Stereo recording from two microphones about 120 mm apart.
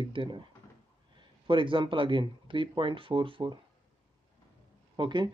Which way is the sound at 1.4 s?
45° right (ahead or behind).